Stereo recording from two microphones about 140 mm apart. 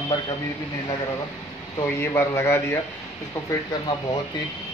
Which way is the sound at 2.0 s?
15° left (ahead or behind).